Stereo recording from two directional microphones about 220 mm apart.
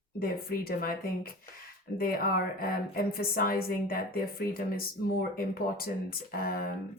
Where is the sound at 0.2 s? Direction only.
40° left (ahead or behind).